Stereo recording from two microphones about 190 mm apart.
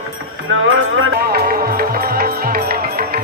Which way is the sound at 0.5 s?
90° right.